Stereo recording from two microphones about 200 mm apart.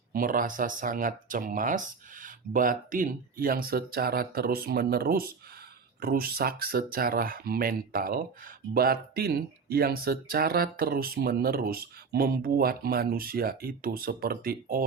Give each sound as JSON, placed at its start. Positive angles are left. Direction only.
{"t": 0.1, "sound": "speech", "side_deg": -45}